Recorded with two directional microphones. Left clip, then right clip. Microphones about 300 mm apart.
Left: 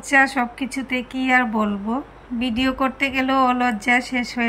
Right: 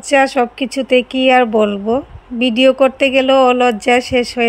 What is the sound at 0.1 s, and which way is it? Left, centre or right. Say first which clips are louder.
A woman's voice: right 5 dB; centre.